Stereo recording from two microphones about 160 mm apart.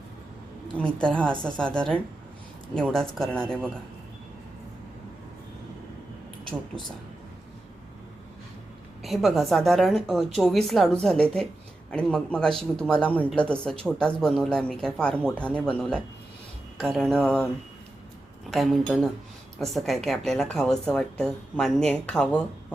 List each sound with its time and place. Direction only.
0.8 s a woman's voice: 5° left (ahead or behind)
2.7 s speech: 5° left (ahead or behind)
9.0 s speech: centre (ahead or behind)
18.5 s speech: centre (ahead or behind)